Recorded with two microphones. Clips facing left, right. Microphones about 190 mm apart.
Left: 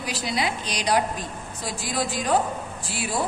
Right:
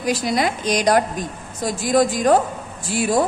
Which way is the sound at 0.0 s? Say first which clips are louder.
Right 7 dB; 45° right (ahead or behind).